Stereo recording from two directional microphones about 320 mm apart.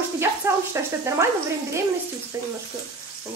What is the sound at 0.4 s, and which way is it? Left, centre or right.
Speech, centre.